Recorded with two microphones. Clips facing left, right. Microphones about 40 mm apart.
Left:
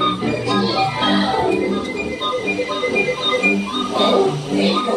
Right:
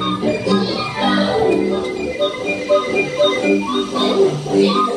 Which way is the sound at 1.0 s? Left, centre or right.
Centre.